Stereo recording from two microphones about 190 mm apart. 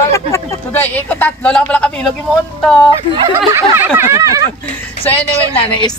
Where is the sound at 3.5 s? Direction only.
10° right (ahead or behind).